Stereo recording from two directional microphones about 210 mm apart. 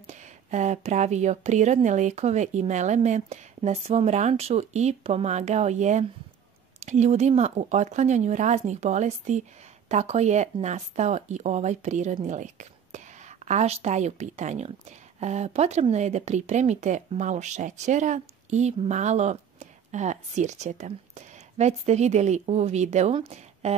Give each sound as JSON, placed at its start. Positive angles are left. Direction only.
{"t": 0.0, "sound": "speech", "side_deg": -35}